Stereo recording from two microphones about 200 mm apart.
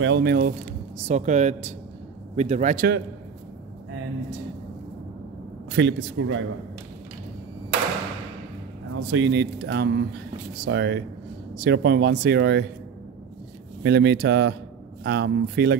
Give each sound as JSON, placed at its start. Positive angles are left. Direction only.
{"t": 0.0, "sound": "speech", "side_deg": -60}
{"t": 0.9, "sound": "speech", "side_deg": -35}
{"t": 5.8, "sound": "speech", "side_deg": -70}
{"t": 9.1, "sound": "speech", "side_deg": -65}
{"t": 13.8, "sound": "speech", "side_deg": -55}